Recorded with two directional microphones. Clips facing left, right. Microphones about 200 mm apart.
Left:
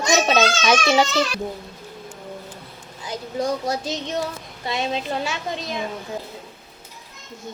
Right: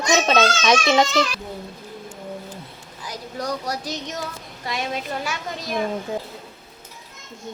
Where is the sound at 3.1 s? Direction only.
25° left (ahead or behind).